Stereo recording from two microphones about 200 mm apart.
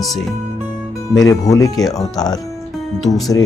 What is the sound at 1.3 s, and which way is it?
Speech, 15° left (ahead or behind).